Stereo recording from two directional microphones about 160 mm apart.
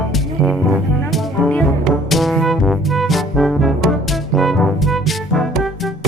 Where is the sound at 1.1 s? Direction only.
Centre (ahead or behind).